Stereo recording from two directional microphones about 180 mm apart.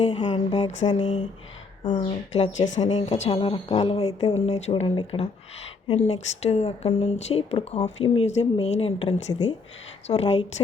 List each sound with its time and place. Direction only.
0.0 s a woman's voice: 35° left (ahead or behind)
2.0 s a woman's voice: 35° left (ahead or behind)